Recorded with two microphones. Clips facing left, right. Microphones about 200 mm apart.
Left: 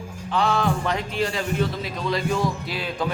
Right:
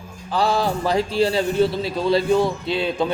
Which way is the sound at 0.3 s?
35° right (ahead or behind).